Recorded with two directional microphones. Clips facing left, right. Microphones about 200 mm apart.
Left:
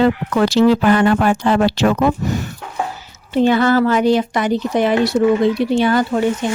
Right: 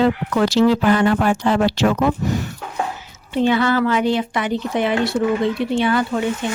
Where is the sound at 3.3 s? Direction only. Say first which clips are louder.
Left 4 dB; 45° left (ahead or behind).